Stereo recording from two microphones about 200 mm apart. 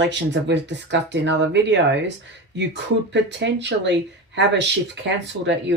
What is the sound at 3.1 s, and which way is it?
Speech, 60° right (ahead or behind).